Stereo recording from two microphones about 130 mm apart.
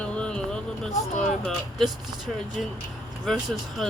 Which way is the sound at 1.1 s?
65° left (ahead or behind).